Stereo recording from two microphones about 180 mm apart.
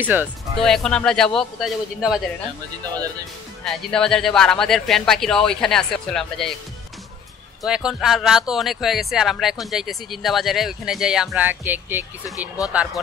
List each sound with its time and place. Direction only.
0.0 s speech: 10° right (ahead or behind)
0.6 s speech: centre (ahead or behind)
3.6 s speech: 5° left (ahead or behind)
7.6 s speech: 5° right (ahead or behind)
12.4 s speech: 20° left (ahead or behind)